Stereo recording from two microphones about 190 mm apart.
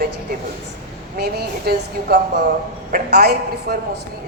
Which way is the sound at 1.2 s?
55° right (ahead or behind).